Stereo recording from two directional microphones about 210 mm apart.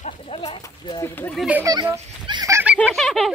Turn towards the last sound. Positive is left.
turn(degrees=0)  # may be behind; listen again after turning